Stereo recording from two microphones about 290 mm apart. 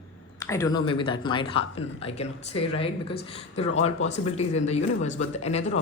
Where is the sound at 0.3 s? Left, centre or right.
Centre.